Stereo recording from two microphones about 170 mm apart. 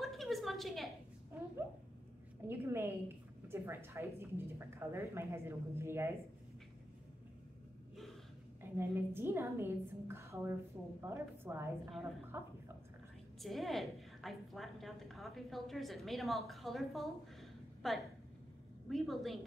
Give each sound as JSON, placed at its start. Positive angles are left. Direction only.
{"t": 0.0, "sound": "a sound", "side_deg": 0}
{"t": 2.4, "sound": "a woman's voice", "side_deg": -15}
{"t": 8.6, "sound": "a woman's voice", "side_deg": -10}
{"t": 13.4, "sound": "a woman's voice", "side_deg": 0}